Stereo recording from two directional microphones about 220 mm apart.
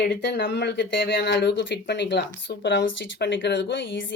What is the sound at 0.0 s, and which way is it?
Speech, 55° left (ahead or behind).